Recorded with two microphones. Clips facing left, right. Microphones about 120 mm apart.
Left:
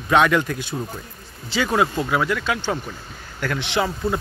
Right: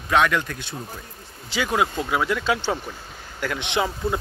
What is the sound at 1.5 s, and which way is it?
Speech, 10° right (ahead or behind).